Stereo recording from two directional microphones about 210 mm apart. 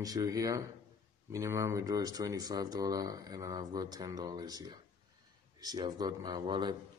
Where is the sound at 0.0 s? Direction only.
15° right (ahead or behind).